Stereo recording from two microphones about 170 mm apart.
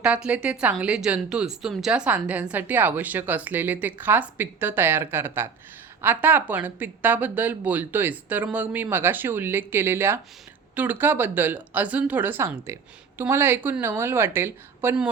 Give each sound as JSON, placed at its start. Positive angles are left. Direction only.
{"t": 0.0, "sound": "speech", "side_deg": -5}